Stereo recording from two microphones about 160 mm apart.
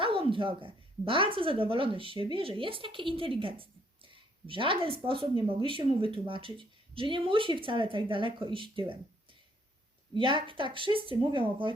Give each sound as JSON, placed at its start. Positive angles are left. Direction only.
{"t": 0.0, "sound": "speech", "side_deg": -35}
{"t": 10.2, "sound": "speech", "side_deg": -30}